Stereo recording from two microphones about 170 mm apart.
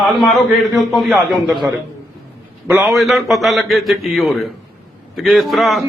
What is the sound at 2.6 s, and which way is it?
A man's voice, centre (ahead or behind).